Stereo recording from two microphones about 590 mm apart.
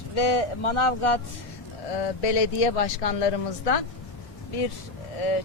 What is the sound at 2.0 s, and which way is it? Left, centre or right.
Speech, left.